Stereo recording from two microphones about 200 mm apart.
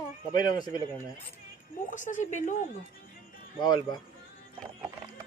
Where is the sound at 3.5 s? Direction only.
20° left (ahead or behind).